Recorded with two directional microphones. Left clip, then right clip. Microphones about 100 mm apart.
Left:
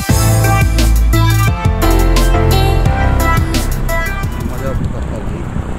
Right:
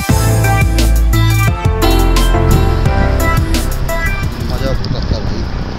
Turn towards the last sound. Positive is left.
turn(degrees=-30)  # may be behind; listen again after turning